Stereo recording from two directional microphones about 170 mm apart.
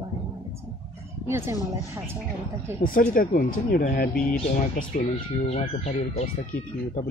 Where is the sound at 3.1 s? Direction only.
55° left (ahead or behind).